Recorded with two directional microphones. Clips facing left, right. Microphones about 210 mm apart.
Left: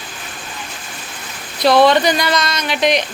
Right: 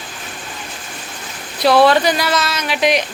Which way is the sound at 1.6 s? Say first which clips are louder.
Even; 10° right (ahead or behind).